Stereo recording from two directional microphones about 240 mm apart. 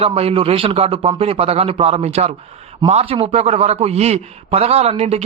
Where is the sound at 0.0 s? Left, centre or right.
Right.